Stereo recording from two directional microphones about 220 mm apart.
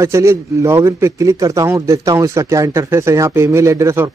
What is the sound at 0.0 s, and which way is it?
Speech, 15° right (ahead or behind).